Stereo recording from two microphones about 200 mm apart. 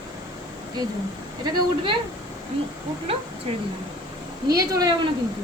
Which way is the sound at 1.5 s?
25° right (ahead or behind).